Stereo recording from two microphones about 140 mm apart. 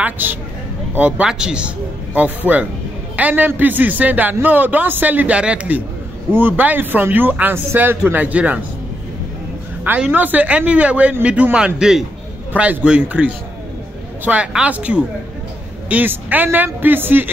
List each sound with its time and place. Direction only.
0.0 s a man's voice: 15° right (ahead or behind)
9.8 s a man's voice: 10° right (ahead or behind)